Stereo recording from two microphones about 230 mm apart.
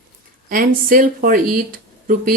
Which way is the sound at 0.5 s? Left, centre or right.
Right.